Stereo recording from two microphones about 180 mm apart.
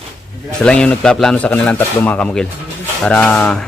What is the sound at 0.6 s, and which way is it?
A man's voice, 5° left (ahead or behind).